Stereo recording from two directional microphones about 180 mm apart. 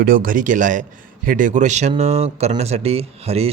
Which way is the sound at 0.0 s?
50° right (ahead or behind).